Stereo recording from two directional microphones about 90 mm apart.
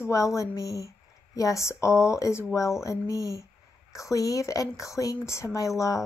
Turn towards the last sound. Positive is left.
turn(degrees=35)  # may be behind; listen again after turning